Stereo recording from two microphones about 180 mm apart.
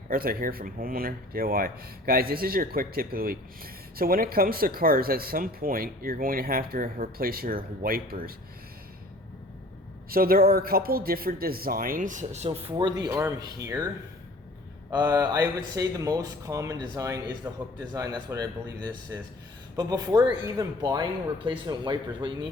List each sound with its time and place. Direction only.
0.1 s speech: 55° right (ahead or behind)
10.1 s speech: 55° right (ahead or behind); by 13.1 s 25° right (ahead or behind)
13.1 s speech: 15° right (ahead or behind)
19.7 s speech: 20° right (ahead or behind)